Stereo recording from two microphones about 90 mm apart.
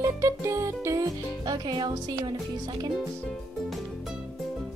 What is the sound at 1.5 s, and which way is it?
Speech, 55° right (ahead or behind).